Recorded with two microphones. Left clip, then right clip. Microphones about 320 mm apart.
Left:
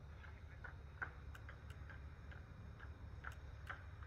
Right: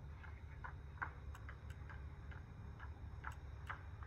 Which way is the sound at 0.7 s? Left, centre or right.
Centre.